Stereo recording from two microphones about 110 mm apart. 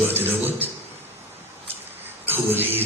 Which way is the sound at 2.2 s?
20° right (ahead or behind).